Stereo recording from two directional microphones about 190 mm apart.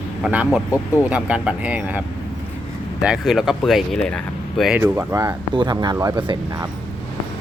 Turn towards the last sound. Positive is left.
turn(degrees=-25)  # may be behind; listen again after turning